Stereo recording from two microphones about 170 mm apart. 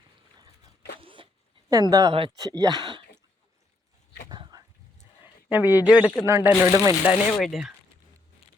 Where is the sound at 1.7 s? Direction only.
20° right (ahead or behind).